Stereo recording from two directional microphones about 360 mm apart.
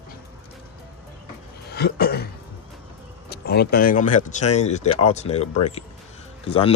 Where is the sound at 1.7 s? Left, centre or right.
Left.